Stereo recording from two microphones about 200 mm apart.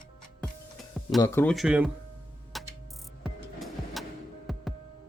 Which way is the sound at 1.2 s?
10° left (ahead or behind).